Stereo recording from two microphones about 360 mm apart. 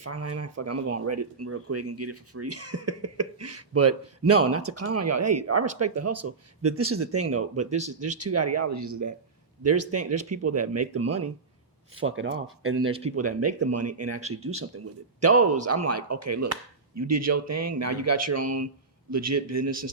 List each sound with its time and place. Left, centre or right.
0.0 s speech: right
7.7 s speech: centre
8.2 s speech: right
9.6 s speech: right
12.9 s speech: centre
13.6 s speech: right
15.3 s speech: right
15.6 s speech: right